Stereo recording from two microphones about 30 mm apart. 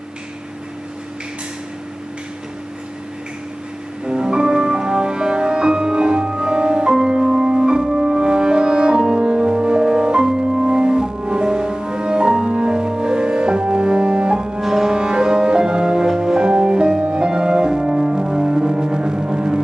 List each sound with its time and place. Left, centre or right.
4.0 s music: right
14.6 s music: centre
14.9 s music: right